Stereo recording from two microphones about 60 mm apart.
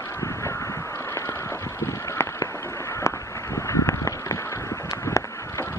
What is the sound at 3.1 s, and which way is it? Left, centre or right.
Run, left.